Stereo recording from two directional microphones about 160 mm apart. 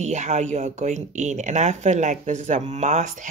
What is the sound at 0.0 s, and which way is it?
Speech, 45° right (ahead or behind).